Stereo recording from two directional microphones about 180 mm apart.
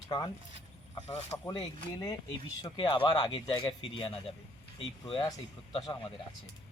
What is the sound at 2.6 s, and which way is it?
Speech, 25° left (ahead or behind).